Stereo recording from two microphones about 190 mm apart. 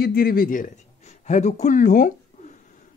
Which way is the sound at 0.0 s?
50° left (ahead or behind).